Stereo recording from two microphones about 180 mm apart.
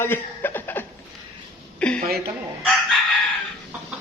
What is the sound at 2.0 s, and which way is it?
Speech, 55° right (ahead or behind).